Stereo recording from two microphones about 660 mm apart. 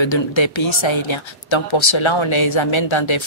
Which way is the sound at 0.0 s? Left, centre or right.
Left.